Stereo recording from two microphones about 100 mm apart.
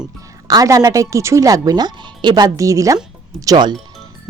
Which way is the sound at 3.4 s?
45° right (ahead or behind).